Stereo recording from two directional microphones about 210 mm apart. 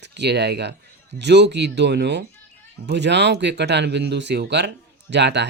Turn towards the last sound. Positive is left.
turn(degrees=-55)  # may be behind; listen again after turning